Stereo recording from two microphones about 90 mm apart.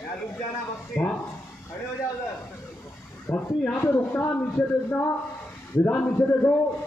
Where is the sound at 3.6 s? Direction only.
20° left (ahead or behind).